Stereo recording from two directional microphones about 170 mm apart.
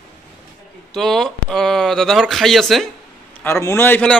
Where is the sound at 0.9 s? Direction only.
Centre (ahead or behind).